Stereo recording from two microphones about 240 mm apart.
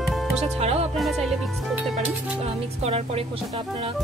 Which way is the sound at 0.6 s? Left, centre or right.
Right.